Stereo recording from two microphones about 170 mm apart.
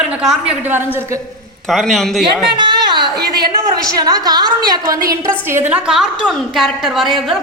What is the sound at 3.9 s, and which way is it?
A woman's voice, 20° right (ahead or behind).